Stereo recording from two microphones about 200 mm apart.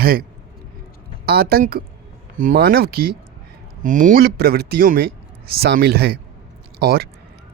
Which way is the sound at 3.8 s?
40° right (ahead or behind).